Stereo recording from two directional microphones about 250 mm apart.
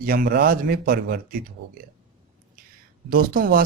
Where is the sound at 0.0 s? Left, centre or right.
Right.